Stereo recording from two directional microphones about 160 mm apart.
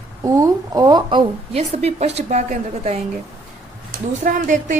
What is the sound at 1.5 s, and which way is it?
A woman's voice, 40° right (ahead or behind).